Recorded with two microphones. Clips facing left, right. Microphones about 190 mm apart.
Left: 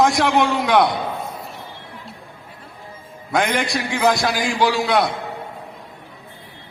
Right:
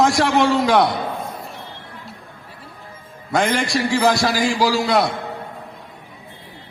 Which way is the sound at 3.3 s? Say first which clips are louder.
Right 1 dB; centre (ahead or behind).